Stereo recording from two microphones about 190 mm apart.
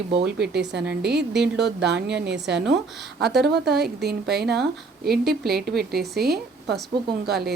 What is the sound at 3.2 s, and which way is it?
A woman's voice, 55° right (ahead or behind).